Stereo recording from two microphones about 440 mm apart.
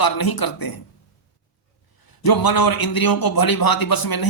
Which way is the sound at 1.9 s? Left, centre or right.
Left.